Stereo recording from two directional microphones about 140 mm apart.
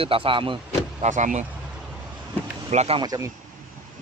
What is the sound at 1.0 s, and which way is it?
Speech, 60° right (ahead or behind).